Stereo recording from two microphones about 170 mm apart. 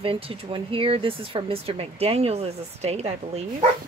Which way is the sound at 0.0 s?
35° right (ahead or behind).